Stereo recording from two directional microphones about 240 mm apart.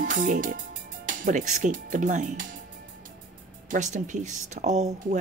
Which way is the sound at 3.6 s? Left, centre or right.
Right.